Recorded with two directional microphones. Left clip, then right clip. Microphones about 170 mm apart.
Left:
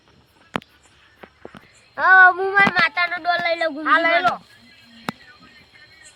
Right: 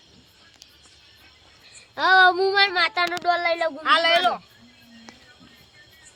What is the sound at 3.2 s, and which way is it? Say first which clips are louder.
Speech: even; 90° right.